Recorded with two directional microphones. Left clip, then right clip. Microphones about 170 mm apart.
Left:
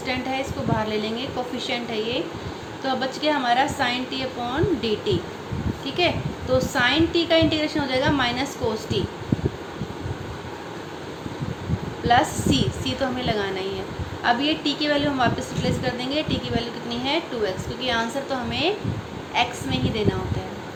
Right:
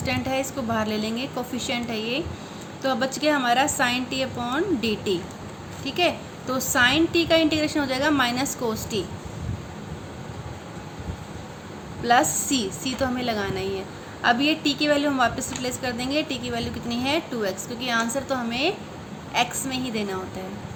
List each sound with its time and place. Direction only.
0.0 s a woman's voice: 35° right (ahead or behind)
12.0 s a woman's voice: 35° right (ahead or behind)